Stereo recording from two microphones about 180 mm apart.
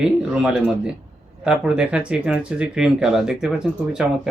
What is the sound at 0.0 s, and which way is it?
Speech, 5° right (ahead or behind).